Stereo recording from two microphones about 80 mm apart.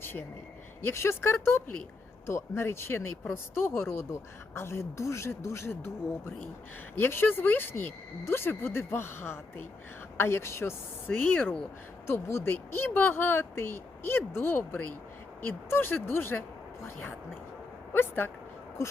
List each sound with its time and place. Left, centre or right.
0.0 s a sound: left
0.8 s speech: left
6.9 s speech: left